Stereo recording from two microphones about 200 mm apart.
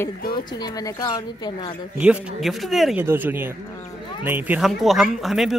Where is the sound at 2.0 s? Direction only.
5° right (ahead or behind).